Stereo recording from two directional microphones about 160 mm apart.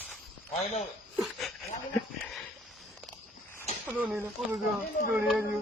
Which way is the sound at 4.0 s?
5° right (ahead or behind).